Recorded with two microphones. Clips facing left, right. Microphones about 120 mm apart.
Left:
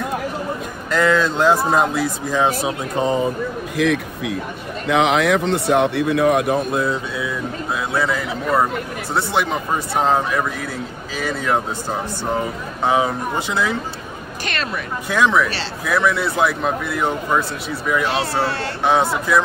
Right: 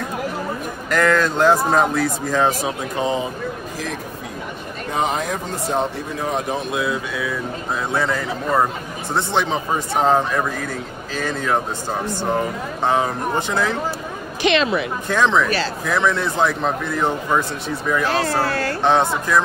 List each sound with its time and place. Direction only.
0.8 s speech: 15° left (ahead or behind)
3.0 s speech: 40° left (ahead or behind)
3.7 s speech: 65° left (ahead or behind)
4.8 s speech: 85° left; by 7.0 s 45° left (ahead or behind)
7.9 s speech: 5° left (ahead or behind)
12.8 s speech: 10° left (ahead or behind)
14.4 s a sound: 45° left (ahead or behind)
15.0 s speech: 10° left (ahead or behind)
18.1 s speech: 25° left (ahead or behind)
18.9 s speech: 10° left (ahead or behind)